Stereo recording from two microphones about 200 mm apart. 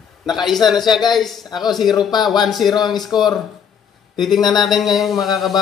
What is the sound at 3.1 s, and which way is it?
Speech, 20° left (ahead or behind).